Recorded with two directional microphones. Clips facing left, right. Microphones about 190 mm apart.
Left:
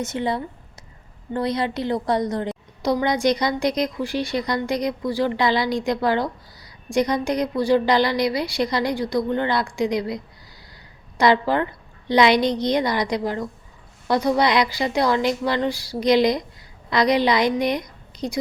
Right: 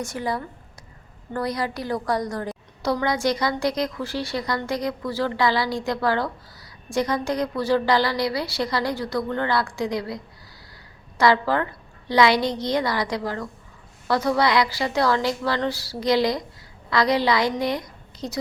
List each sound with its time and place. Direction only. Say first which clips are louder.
0.0 s a woman's voice: left 3 dB; 20° left (ahead or behind)
11.2 s a woman's voice: left 1 dB; 20° left (ahead or behind)